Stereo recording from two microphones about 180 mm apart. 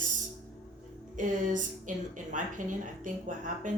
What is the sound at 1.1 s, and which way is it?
Speech, 45° right (ahead or behind).